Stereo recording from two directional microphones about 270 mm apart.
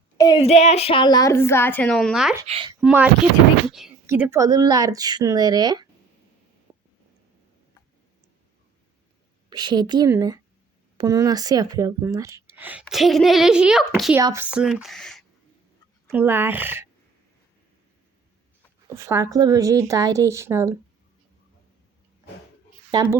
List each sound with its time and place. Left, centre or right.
0.2 s a woman's voice: centre
2.5 s speech: centre
2.8 s a woman's voice: centre
6.7 s a sound: centre
9.5 s a woman's voice: centre
18.9 s speech: centre
22.9 s speech: centre